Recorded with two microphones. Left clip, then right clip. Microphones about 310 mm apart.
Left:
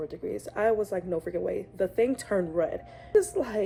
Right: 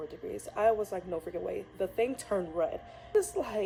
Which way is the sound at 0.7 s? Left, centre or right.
Left.